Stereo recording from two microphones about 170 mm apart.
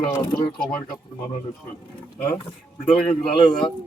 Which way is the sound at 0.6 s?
5° left (ahead or behind).